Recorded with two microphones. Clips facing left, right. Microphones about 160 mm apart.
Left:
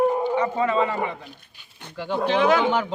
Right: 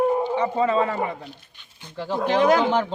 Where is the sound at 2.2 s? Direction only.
45° right (ahead or behind).